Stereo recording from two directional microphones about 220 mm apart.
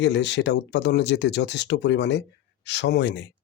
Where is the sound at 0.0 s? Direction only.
55° left (ahead or behind).